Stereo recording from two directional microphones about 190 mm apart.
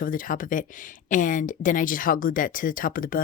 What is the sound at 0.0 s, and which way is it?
Speech, 45° left (ahead or behind).